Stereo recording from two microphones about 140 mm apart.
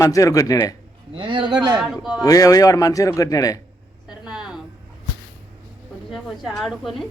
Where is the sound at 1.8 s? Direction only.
5° right (ahead or behind).